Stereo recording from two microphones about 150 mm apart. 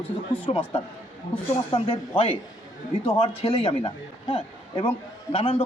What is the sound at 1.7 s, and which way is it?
A man's voice, 40° left (ahead or behind).